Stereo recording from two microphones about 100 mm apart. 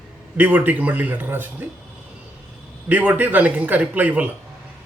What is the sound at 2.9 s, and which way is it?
Speech, 15° right (ahead or behind).